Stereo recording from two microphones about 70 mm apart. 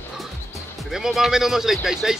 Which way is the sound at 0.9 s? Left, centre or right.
Centre.